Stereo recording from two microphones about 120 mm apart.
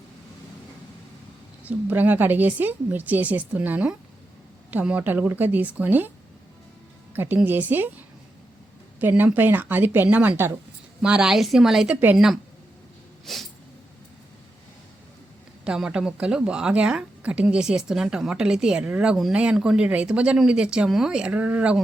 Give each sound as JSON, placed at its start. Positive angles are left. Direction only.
{"t": 1.6, "sound": "speech", "side_deg": -15}
{"t": 7.1, "sound": "speech", "side_deg": -15}
{"t": 9.0, "sound": "speech", "side_deg": -15}
{"t": 11.0, "sound": "a woman's voice", "side_deg": -5}
{"t": 13.3, "sound": "dog", "side_deg": 0}
{"t": 15.6, "sound": "speech", "side_deg": -5}